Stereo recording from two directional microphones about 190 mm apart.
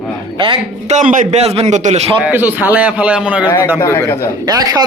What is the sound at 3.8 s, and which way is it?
Speech, 15° left (ahead or behind).